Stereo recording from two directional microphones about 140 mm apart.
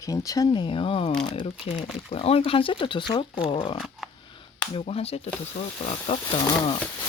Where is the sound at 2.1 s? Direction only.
45° left (ahead or behind).